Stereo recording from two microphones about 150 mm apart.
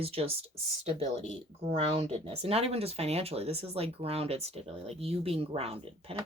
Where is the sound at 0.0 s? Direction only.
40° right (ahead or behind).